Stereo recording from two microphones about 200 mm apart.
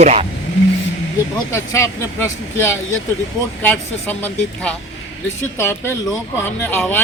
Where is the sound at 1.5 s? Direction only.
15° left (ahead or behind).